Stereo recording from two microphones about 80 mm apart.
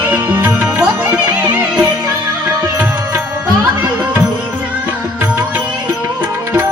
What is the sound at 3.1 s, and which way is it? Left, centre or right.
Music, right.